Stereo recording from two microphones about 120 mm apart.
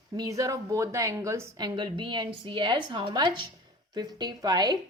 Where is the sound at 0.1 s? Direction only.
30° right (ahead or behind).